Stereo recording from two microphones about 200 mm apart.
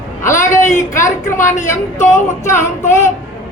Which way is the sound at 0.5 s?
15° left (ahead or behind).